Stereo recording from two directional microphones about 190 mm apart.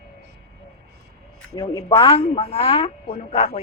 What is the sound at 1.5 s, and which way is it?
Speech, 20° left (ahead or behind).